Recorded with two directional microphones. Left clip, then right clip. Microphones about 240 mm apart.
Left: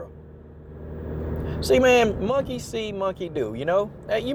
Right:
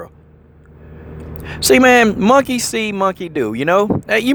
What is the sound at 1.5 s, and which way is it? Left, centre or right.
Speech, right.